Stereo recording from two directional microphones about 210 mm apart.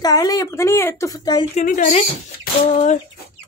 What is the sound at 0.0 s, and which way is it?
Speech, 15° left (ahead or behind).